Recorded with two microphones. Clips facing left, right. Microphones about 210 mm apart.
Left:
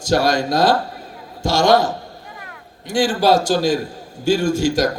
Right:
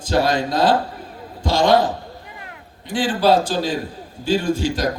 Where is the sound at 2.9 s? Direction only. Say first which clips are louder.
Left 1 dB; 45° left (ahead or behind).